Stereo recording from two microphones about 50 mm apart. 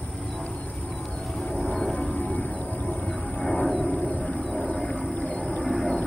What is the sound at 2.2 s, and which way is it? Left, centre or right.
Music, left.